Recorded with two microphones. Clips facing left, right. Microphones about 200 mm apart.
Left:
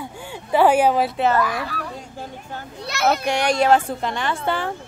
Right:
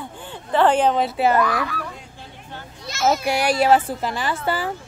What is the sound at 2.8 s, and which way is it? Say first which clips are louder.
Speech: even; 65° left (ahead or behind).